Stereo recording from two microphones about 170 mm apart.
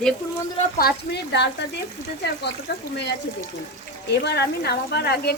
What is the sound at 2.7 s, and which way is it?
Speech, 80° left.